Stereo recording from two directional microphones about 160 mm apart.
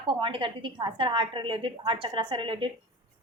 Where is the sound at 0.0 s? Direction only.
30° right (ahead or behind).